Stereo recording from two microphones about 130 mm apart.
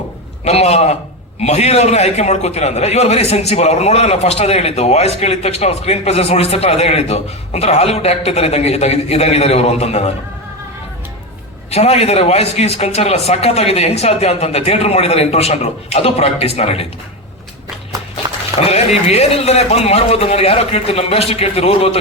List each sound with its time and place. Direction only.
0.4 s a man's voice: 55° left (ahead or behind)
11.7 s a man's voice: 55° left (ahead or behind)
18.6 s a man's voice: 55° left (ahead or behind)